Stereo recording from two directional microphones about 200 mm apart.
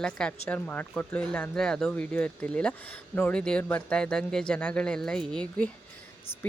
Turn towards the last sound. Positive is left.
turn(degrees=5)  # may be behind; listen again after turning